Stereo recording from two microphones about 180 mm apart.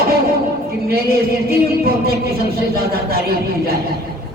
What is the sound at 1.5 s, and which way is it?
A man's voice, 60° right (ahead or behind).